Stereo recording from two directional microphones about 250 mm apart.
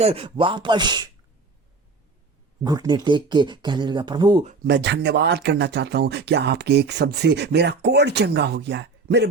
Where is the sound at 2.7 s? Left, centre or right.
Centre.